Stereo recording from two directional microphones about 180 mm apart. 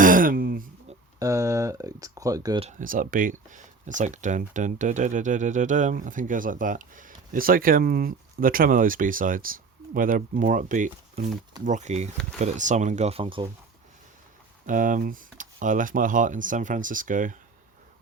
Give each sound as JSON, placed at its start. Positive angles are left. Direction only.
{"t": 0.0, "sound": "a sound", "side_deg": -50}
{"t": 1.2, "sound": "speech", "side_deg": -15}
{"t": 2.6, "sound": "speech", "side_deg": -40}
{"t": 14.7, "sound": "speech", "side_deg": -45}